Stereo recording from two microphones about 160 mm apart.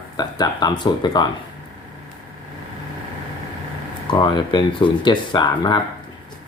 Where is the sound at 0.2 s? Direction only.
25° left (ahead or behind).